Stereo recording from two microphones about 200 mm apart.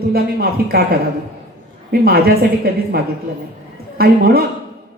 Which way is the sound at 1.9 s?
50° right (ahead or behind).